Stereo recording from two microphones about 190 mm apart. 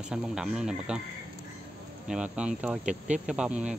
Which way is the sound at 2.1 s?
5° right (ahead or behind).